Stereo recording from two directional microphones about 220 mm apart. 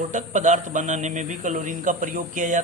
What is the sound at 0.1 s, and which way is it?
Speech, 35° right (ahead or behind).